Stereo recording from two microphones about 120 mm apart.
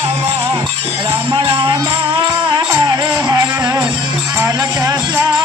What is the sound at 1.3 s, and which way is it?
Speech, 40° right (ahead or behind).